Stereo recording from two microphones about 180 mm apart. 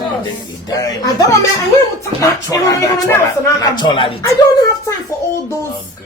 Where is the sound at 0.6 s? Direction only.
20° left (ahead or behind).